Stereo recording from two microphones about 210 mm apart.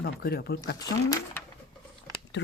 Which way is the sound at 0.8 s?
15° left (ahead or behind).